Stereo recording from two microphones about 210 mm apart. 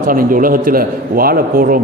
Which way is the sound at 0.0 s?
40° right (ahead or behind).